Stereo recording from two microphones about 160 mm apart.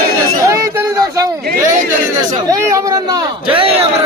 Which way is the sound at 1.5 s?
60° right (ahead or behind).